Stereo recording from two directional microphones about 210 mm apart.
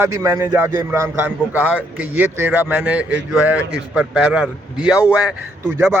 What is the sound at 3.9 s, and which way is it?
A man's voice, 5° right (ahead or behind).